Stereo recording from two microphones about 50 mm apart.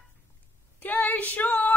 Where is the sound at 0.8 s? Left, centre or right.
Left.